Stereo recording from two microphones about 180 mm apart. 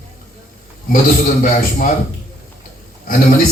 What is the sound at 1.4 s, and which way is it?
Speech, 50° left (ahead or behind).